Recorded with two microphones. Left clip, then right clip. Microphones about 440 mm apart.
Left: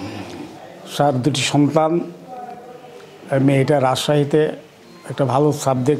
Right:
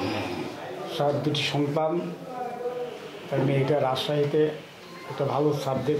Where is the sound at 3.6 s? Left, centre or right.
Left.